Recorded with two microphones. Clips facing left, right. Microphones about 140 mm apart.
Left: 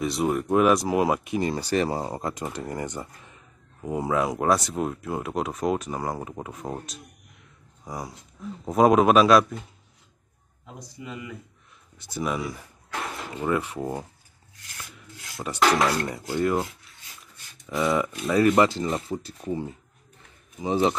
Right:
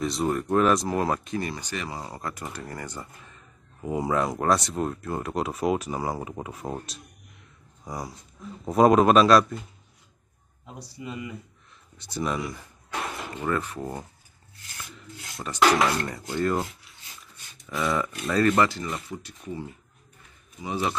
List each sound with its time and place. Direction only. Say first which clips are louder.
0.0 s speech: left 1 dB; centre (ahead or behind)
1.5 s speech: left 9 dB; 35° left (ahead or behind); by 3.1 s 20° left (ahead or behind)
3.8 s speech: left 1 dB; centre (ahead or behind)
11.0 s speech: right 2 dB; 25° right (ahead or behind)
12.1 s a sound: left 1 dB; 5° left (ahead or behind)
13.4 s speech: left 2 dB; 15° left (ahead or behind)
15.5 s speech: even; centre (ahead or behind)
17.7 s speech: left 3 dB; centre (ahead or behind)
18.4 s speech: left 2 dB; 20° left (ahead or behind)
20.6 s speech: left 6 dB; 30° left (ahead or behind)